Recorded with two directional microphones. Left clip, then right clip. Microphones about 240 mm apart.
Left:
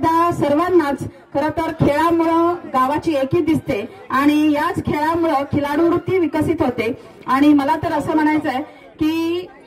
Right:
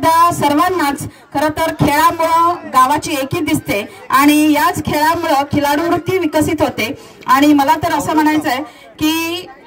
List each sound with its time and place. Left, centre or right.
0.0 s speech: right